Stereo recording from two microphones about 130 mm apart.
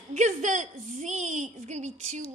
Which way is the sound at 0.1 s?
70° right (ahead or behind).